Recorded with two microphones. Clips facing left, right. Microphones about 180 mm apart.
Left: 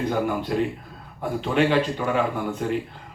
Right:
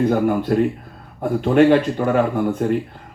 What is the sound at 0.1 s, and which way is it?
A man's voice, 50° right (ahead or behind).